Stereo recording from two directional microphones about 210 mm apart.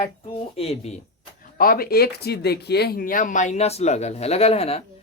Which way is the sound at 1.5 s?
45° left (ahead or behind).